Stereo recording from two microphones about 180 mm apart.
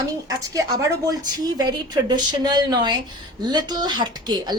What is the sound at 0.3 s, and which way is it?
Speech, 20° right (ahead or behind).